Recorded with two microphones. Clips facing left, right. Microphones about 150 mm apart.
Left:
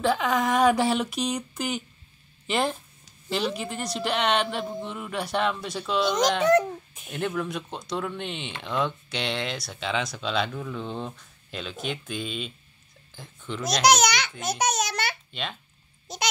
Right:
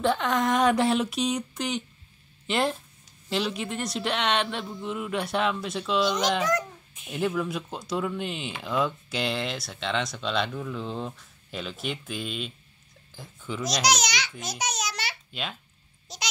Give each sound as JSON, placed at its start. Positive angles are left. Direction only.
{"t": 0.0, "sound": "speech", "side_deg": 0}
{"t": 13.7, "sound": "speech", "side_deg": 55}
{"t": 14.4, "sound": "babbling", "side_deg": 55}
{"t": 16.1, "sound": "speech", "side_deg": 55}